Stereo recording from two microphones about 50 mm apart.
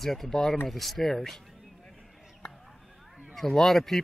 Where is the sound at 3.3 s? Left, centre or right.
Centre.